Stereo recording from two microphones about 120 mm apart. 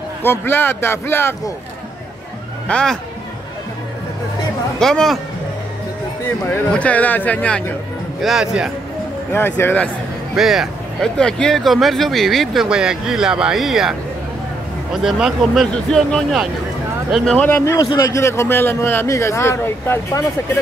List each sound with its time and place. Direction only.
0.2 s a man's voice: 20° left (ahead or behind)
2.7 s speech: 5° left (ahead or behind)
4.7 s speech: 5° left (ahead or behind)
6.2 s a man's voice: 20° left (ahead or behind)
8.2 s speech: 5° right (ahead or behind)
9.3 s speech: 20° left (ahead or behind)
10.3 s speech: centre (ahead or behind)
15.0 s speech: 5° right (ahead or behind); by 17.7 s 20° left (ahead or behind)
17.7 s a man's voice: 30° left (ahead or behind)